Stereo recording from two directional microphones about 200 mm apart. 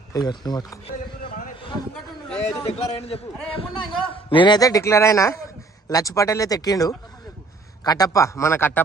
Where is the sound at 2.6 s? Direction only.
30° left (ahead or behind); by 8.7 s 10° left (ahead or behind).